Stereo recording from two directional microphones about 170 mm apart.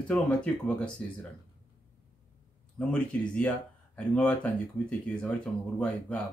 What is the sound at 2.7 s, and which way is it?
Speech, 10° left (ahead or behind).